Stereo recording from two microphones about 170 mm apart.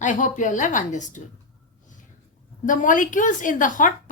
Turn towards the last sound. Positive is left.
turn(degrees=50)  # may be behind; listen again after turning